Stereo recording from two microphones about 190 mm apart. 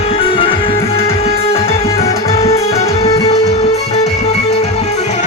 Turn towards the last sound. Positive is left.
turn(degrees=35)  # may be behind; listen again after turning